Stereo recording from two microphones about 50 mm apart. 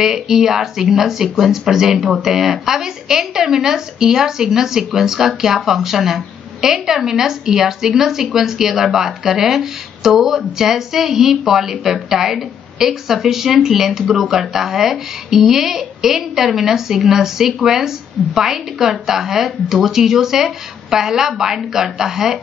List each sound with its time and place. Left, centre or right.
0.0 s speech: centre